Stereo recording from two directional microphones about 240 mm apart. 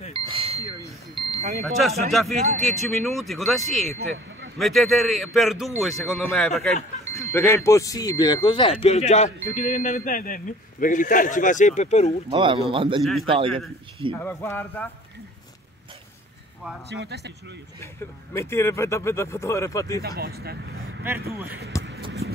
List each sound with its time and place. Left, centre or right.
0.1 s ding: right
1.1 s bicycle bell: right
1.6 s speech: centre
4.0 s speech: right
4.6 s a man's voice: centre; by 12.2 s left
12.3 s speech: centre
13.0 s speech: centre
16.9 s speech: right
18.3 s speech: centre
20.2 s speech: right
22.0 s a sound: right